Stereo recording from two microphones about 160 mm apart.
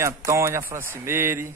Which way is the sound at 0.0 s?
20° right (ahead or behind).